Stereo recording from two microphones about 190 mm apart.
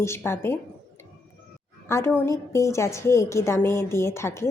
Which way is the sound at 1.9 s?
15° left (ahead or behind).